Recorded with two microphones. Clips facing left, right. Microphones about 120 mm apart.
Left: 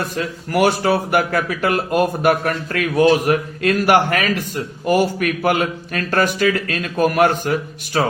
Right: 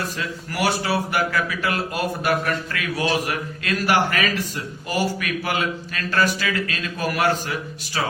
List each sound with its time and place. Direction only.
0.0 s speech: 55° left (ahead or behind)